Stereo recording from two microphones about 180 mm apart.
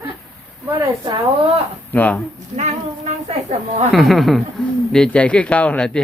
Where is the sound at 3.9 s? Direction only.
Centre (ahead or behind).